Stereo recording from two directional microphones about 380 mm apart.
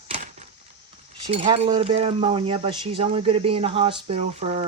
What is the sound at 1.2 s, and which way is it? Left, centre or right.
Speech, centre.